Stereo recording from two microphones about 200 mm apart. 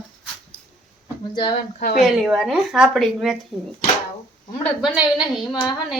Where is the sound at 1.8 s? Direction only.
50° left (ahead or behind).